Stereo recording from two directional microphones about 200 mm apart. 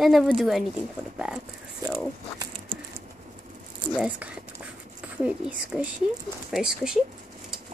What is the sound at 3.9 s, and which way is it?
Speech, 5° right (ahead or behind).